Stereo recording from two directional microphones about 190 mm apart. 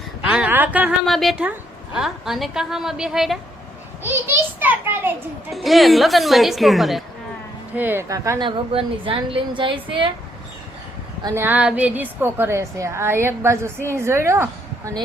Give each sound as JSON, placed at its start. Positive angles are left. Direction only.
{"t": 0.3, "sound": "a woman's voice", "side_deg": -10}
{"t": 11.2, "sound": "a woman's voice", "side_deg": -15}